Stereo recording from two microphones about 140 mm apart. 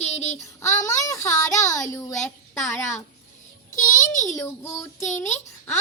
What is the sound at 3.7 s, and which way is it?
Speech, 65° left (ahead or behind).